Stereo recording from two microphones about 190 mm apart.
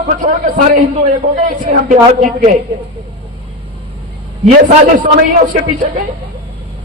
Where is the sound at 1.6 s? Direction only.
45° right (ahead or behind).